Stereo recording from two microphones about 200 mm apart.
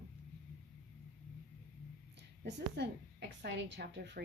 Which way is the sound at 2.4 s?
60° right (ahead or behind).